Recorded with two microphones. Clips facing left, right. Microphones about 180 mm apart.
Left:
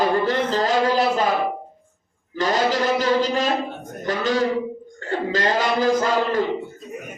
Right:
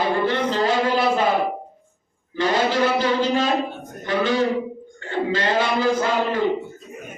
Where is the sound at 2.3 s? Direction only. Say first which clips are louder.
Even; 40° left (ahead or behind).